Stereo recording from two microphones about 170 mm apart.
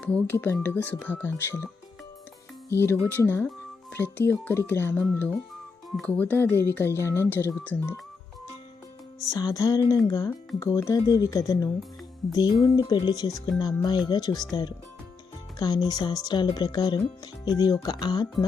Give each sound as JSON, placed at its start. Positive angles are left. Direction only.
{"t": 0.0, "sound": "speech", "side_deg": 5}
{"t": 9.3, "sound": "speech", "side_deg": 20}
{"t": 15.5, "sound": "speech", "side_deg": 25}